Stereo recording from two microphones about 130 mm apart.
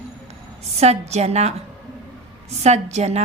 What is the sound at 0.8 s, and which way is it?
Speech, 55° right (ahead or behind).